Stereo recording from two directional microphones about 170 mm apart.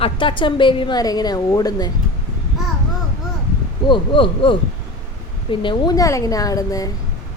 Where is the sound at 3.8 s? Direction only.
30° left (ahead or behind).